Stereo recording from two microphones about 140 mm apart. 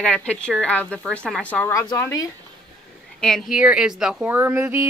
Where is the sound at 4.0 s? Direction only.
5° right (ahead or behind).